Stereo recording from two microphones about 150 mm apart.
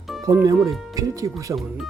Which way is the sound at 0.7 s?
Centre (ahead or behind).